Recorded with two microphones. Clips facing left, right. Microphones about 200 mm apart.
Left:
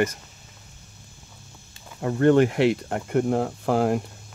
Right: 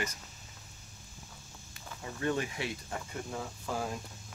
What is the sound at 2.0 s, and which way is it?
Speech, 65° left (ahead or behind).